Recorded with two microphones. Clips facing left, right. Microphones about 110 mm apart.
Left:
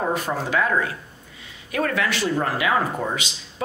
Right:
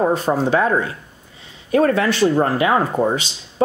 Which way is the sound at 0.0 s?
30° right (ahead or behind).